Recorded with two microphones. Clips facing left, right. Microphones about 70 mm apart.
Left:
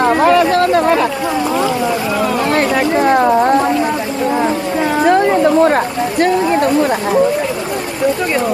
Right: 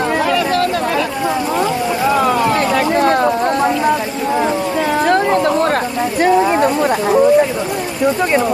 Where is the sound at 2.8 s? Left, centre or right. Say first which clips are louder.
Left 2 dB; centre.